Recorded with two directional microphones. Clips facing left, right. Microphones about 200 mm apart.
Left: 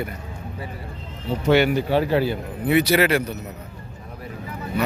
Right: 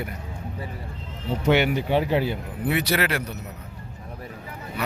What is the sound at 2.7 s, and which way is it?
Speech, centre (ahead or behind).